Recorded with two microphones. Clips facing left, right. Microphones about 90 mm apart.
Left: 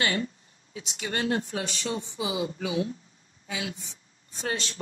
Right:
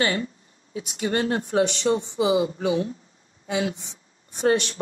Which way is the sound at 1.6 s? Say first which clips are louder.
Right 11 dB; 65° right (ahead or behind).